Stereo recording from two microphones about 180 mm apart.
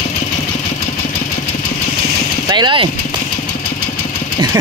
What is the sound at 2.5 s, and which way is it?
Speech, 25° right (ahead or behind).